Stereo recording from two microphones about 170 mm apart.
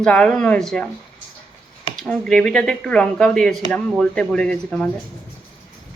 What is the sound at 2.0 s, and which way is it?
Speech, 5° left (ahead or behind).